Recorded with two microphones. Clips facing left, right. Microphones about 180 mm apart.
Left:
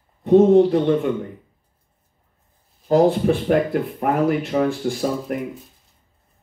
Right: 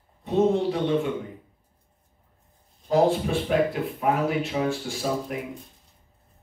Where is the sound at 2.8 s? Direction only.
55° left (ahead or behind).